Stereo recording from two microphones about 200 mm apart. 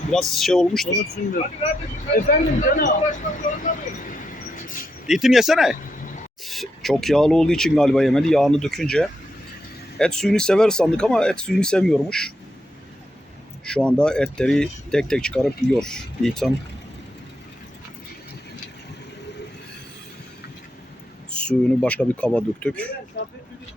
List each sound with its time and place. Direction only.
0.1 s speech: centre (ahead or behind)
0.9 s speech: 45° left (ahead or behind)
3.6 s vehicle: 40° left (ahead or behind)
5.0 s speech: centre (ahead or behind)
13.7 s speech: 5° left (ahead or behind)
21.2 s speech: 5° left (ahead or behind)